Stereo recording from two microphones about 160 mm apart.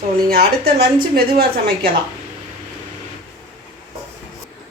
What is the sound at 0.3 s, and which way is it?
Speech, 80° right.